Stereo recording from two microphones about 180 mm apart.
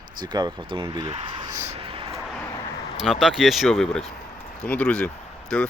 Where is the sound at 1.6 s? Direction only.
35° right (ahead or behind).